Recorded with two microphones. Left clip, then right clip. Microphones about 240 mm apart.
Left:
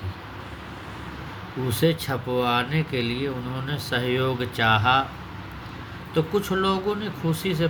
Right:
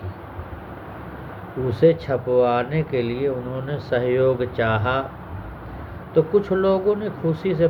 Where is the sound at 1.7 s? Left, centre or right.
Left.